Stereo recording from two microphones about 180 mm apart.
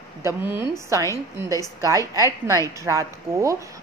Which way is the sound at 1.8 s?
20° right (ahead or behind).